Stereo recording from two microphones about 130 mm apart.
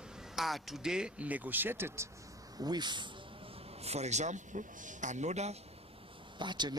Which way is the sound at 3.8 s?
55° right (ahead or behind).